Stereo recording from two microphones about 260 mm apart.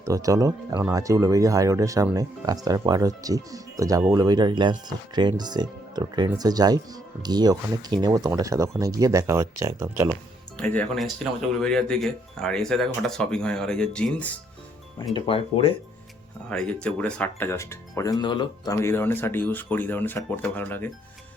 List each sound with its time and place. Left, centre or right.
0.0 s speech: centre
10.6 s speech: centre
15.1 s speech: left
16.5 s speech: centre